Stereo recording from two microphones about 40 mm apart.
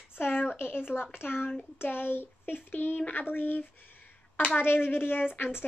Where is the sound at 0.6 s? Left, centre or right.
Left.